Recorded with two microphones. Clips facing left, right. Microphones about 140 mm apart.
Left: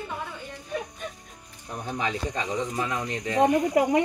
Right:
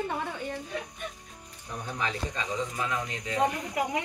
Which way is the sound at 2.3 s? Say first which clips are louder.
Left 4 dB; 40° left (ahead or behind).